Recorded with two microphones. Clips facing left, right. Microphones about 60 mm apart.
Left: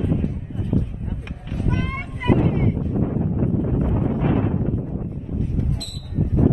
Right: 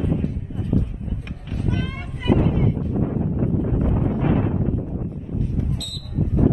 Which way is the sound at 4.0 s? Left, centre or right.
Centre.